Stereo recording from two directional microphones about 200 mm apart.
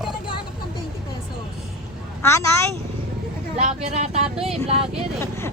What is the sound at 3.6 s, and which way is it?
Speech, 35° right (ahead or behind).